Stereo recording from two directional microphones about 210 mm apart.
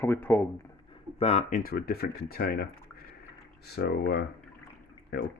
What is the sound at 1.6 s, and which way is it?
Speech, 45° left (ahead or behind).